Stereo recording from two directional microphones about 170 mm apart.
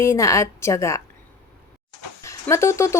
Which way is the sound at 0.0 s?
15° left (ahead or behind).